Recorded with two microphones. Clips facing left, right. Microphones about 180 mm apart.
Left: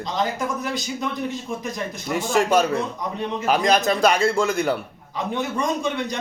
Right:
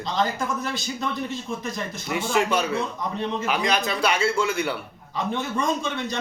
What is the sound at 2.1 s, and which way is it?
Speech, 45° left (ahead or behind).